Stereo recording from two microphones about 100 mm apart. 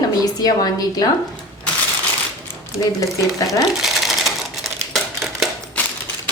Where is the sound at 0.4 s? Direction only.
40° left (ahead or behind).